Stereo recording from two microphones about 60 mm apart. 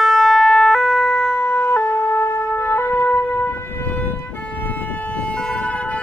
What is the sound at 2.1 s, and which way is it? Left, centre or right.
Shofar, left.